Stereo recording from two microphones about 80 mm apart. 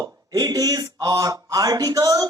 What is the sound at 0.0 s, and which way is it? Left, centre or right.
Speech, right.